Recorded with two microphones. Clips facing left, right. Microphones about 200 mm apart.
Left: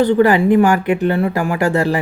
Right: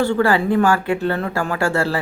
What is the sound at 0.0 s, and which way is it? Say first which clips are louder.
Speech: left 5 dB; 20° left (ahead or behind).